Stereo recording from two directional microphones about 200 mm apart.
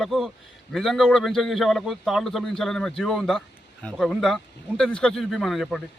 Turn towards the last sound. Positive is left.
turn(degrees=0)  # may be behind; listen again after turning